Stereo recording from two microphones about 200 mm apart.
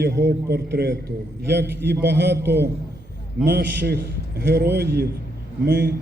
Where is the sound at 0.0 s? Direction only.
55° right (ahead or behind).